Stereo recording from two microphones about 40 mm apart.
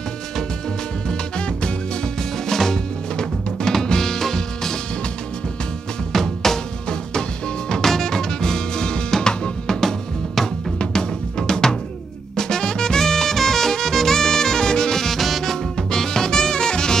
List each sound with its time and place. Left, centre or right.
2.4 s music: centre
6.1 s music: centre
7.7 s music: centre
9.8 s drum: centre
10.8 s drum: centre
12.4 s music: centre
15.9 s music: centre